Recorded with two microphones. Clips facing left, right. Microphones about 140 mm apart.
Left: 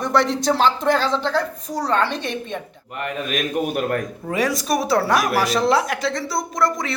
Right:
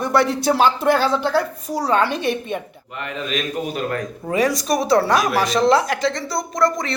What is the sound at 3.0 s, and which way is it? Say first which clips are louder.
A man's voice: left 1 dB; 50° left (ahead or behind).